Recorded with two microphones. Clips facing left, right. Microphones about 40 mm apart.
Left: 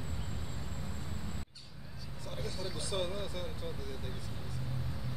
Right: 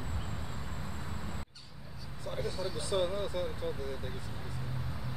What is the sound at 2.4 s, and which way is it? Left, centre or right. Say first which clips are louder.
Speech: right 4 dB; centre.